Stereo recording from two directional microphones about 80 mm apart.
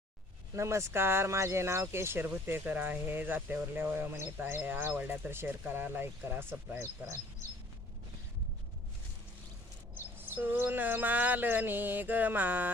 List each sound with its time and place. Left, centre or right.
0.5 s speech: right
10.2 s speech: right